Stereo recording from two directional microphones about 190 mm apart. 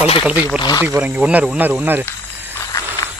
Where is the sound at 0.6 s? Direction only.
20° left (ahead or behind).